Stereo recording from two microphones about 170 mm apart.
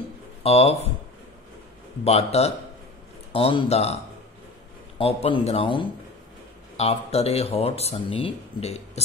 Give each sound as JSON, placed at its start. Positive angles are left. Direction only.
{"t": 0.4, "sound": "speech", "side_deg": 35}
{"t": 2.0, "sound": "speech", "side_deg": 40}
{"t": 4.9, "sound": "speech", "side_deg": 35}